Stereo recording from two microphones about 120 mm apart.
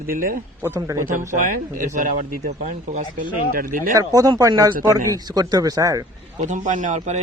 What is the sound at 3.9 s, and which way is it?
Speech, 30° right (ahead or behind).